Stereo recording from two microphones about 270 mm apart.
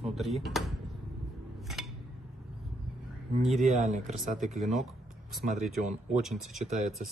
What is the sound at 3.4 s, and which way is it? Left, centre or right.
Speech, centre.